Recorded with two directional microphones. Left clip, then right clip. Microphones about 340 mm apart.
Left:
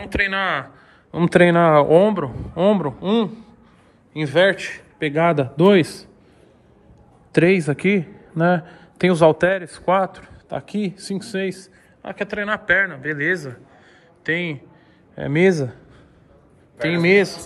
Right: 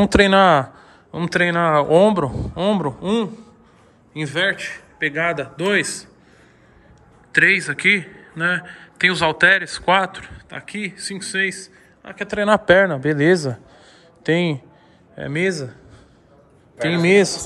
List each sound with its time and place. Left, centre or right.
0.2 s speech: centre
1.1 s a man's voice: centre
7.3 s a man's voice: centre
12.3 s speech: centre
16.8 s speech: centre